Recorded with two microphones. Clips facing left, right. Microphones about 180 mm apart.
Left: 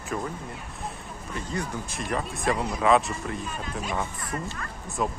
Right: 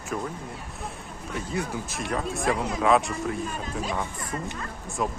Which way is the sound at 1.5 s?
Centre (ahead or behind).